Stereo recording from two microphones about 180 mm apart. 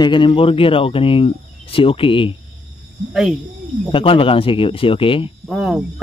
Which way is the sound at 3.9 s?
30° left (ahead or behind).